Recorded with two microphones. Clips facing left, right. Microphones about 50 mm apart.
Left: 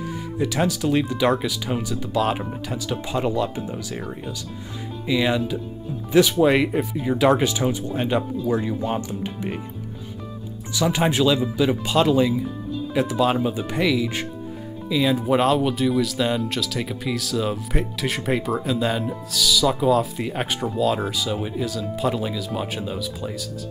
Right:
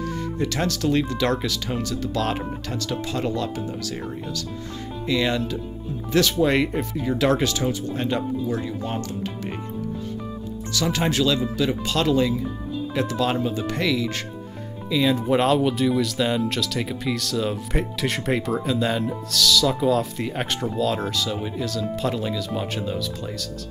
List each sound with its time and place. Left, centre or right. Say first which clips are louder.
0.4 s speech: left 3 dB; centre
5.0 s speech: left 2 dB; centre
10.7 s speech: left 3 dB; centre